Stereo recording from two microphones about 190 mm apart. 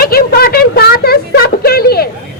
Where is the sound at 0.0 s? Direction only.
55° left (ahead or behind).